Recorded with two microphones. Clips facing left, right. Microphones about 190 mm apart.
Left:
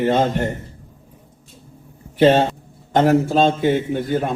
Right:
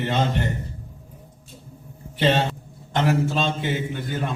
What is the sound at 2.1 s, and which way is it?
A man's voice, 45° left (ahead or behind).